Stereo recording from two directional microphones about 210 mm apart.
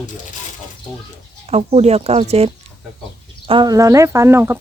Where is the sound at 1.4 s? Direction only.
30° right (ahead or behind).